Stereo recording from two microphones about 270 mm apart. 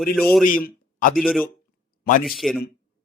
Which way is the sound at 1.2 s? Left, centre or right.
Centre.